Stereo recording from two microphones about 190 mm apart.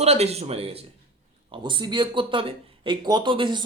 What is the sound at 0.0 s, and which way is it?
Speech, 35° right (ahead or behind).